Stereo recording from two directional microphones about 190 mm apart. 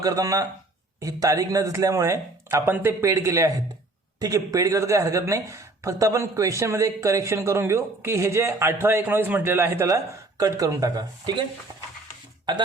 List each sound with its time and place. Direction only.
0.0 s speech: 20° right (ahead or behind)